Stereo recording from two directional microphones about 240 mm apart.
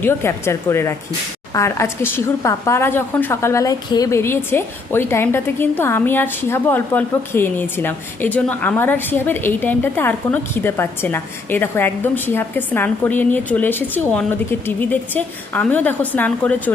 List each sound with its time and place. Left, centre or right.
0.0 s a woman's voice: centre